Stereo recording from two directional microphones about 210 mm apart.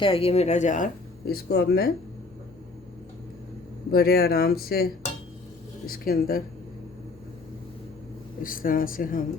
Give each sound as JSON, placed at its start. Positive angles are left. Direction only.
{"t": 0.0, "sound": "speech", "side_deg": 25}
{"t": 1.3, "sound": "speech", "side_deg": 50}
{"t": 3.9, "sound": "speech", "side_deg": 45}
{"t": 8.4, "sound": "speech", "side_deg": 40}